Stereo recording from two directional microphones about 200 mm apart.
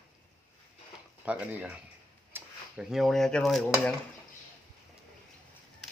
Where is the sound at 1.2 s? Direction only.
5° right (ahead or behind).